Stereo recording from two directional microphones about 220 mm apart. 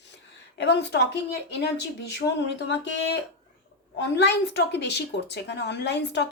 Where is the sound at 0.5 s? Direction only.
50° left (ahead or behind).